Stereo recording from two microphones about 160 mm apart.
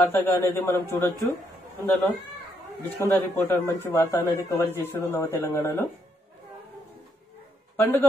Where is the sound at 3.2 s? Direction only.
15° left (ahead or behind).